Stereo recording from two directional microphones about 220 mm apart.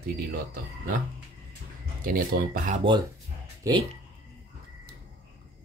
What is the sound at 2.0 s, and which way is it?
Speech, 40° right (ahead or behind).